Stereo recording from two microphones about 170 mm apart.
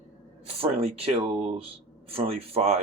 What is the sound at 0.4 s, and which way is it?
Speech, 35° right (ahead or behind).